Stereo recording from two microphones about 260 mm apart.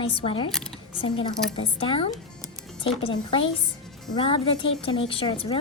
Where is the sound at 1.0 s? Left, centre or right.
Centre.